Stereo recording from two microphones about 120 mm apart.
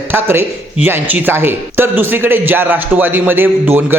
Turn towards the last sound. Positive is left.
turn(degrees=-15)  # may be behind; listen again after turning